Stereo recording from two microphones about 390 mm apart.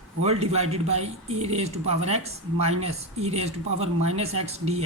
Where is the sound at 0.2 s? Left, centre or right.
Centre.